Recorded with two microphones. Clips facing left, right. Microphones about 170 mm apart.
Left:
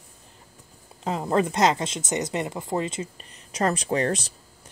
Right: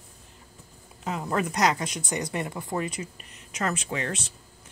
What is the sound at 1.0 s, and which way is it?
Speech, 30° left (ahead or behind).